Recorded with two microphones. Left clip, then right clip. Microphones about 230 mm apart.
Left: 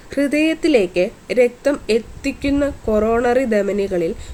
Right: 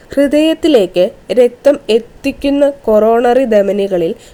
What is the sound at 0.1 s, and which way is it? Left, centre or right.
A woman's voice, centre.